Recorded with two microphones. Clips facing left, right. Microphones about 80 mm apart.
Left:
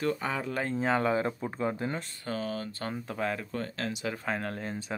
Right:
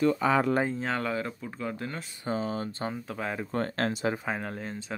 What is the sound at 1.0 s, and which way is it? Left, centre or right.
Speech, left.